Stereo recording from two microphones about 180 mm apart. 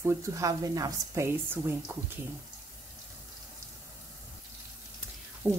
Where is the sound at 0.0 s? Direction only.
15° right (ahead or behind).